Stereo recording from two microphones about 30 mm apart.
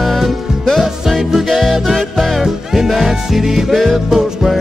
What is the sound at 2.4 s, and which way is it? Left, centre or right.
Music, centre.